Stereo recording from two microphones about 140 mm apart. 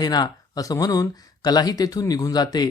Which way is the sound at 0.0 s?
30° left (ahead or behind).